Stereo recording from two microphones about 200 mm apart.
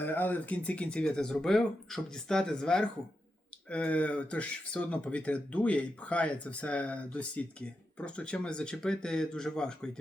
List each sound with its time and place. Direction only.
0.0 s speech: 10° left (ahead or behind)